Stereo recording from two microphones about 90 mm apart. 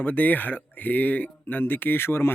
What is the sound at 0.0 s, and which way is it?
Speech, 20° left (ahead or behind).